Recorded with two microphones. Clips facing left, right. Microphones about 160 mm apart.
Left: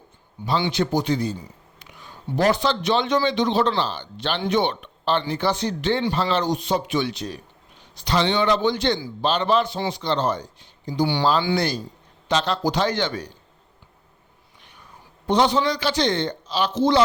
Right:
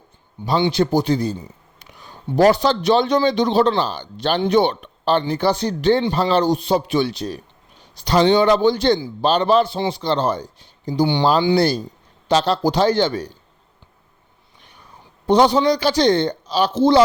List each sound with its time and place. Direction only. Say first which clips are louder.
0.4 s speech: right 3 dB; 25° right (ahead or behind)
0.7 s a man's voice: right 4 dB; 35° right (ahead or behind)
15.3 s speech: right 5 dB; 35° right (ahead or behind)